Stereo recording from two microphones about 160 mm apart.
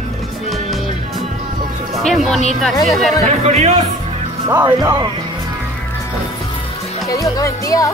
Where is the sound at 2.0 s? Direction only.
Centre (ahead or behind).